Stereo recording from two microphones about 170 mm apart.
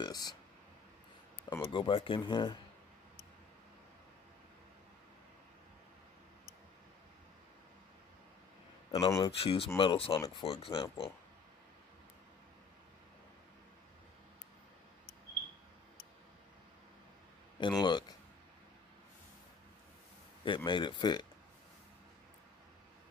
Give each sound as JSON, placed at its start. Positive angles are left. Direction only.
{"t": 0.0, "sound": "speech", "side_deg": 25}
{"t": 1.6, "sound": "speech", "side_deg": 30}
{"t": 8.9, "sound": "speech", "side_deg": 20}
{"t": 17.6, "sound": "speech", "side_deg": 25}
{"t": 20.4, "sound": "speech", "side_deg": 30}